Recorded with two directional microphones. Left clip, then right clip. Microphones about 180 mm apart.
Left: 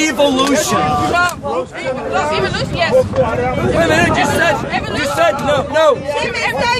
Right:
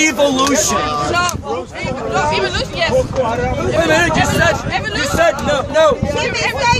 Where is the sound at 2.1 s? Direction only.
45° right (ahead or behind).